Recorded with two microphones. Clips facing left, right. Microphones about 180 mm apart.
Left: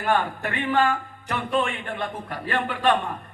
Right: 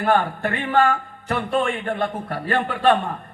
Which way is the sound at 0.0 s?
40° right (ahead or behind).